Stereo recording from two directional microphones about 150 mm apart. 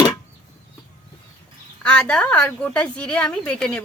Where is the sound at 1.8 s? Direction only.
5° left (ahead or behind).